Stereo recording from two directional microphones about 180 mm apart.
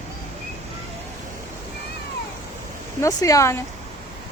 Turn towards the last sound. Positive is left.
turn(degrees=15)  # may be behind; listen again after turning